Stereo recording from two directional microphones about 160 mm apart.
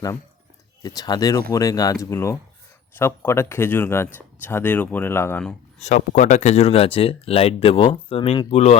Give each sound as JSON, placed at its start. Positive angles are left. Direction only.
{"t": 0.8, "sound": "speech", "side_deg": 25}
{"t": 5.8, "sound": "speech", "side_deg": 50}